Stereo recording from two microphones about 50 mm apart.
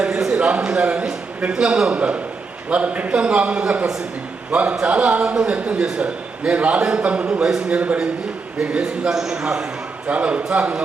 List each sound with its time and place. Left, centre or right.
0.3 s a man's voice: right
5.4 s a man's voice: right
5.8 s a man's voice: centre
6.7 s a man's voice: centre
10.1 s a man's voice: right